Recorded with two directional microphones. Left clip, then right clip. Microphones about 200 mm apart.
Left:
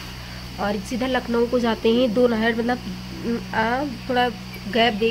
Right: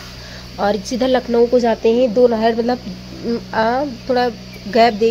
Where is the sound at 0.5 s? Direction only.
25° right (ahead or behind).